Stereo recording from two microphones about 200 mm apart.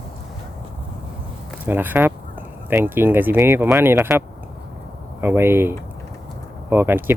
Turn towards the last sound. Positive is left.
turn(degrees=-10)  # may be behind; listen again after turning